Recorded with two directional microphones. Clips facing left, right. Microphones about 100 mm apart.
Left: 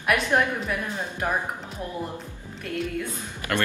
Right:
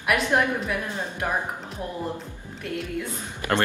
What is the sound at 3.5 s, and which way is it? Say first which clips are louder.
Speech: right 3 dB; 35° right (ahead or behind).